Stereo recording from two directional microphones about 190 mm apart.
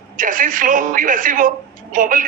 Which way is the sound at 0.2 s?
45° right (ahead or behind).